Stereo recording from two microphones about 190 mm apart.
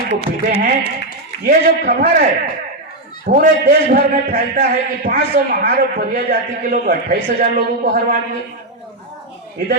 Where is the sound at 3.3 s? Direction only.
50° right (ahead or behind).